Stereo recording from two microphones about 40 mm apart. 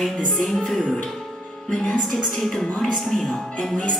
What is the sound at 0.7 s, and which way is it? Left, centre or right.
Music, centre.